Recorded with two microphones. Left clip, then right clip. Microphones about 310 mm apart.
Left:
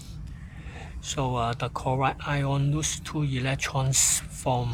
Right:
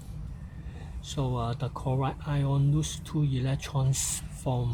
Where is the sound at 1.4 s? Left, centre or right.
Left.